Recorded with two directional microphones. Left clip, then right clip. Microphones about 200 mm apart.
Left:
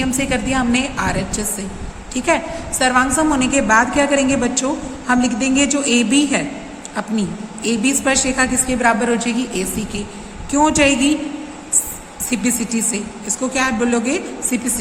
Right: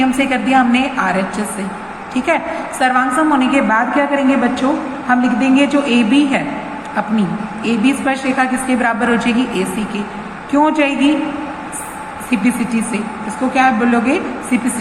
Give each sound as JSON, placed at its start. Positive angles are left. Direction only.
{"t": 0.0, "sound": "a woman's voice", "side_deg": 50}
{"t": 12.3, "sound": "a woman's voice", "side_deg": 50}